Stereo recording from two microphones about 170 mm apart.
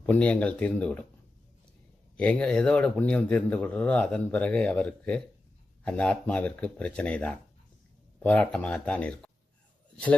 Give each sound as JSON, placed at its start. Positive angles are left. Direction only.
{"t": 0.0, "sound": "speech", "side_deg": 10}
{"t": 2.1, "sound": "speech", "side_deg": 5}